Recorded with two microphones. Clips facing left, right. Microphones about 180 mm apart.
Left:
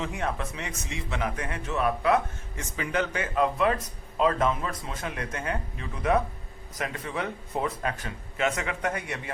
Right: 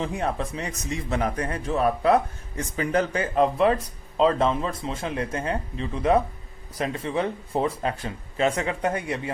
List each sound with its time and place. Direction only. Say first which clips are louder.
0.0 s a man's voice: right 4 dB; 30° right (ahead or behind)